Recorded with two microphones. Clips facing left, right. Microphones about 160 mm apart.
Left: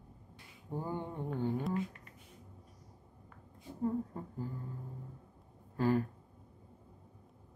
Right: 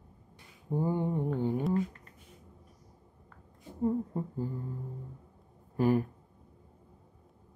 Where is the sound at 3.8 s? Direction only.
25° right (ahead or behind).